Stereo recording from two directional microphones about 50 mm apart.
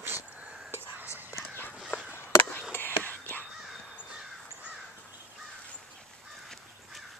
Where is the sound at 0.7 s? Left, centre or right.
Right.